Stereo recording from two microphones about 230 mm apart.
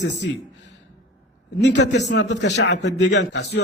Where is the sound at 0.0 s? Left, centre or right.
Left.